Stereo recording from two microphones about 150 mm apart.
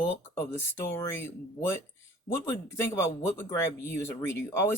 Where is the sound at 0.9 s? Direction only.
15° left (ahead or behind).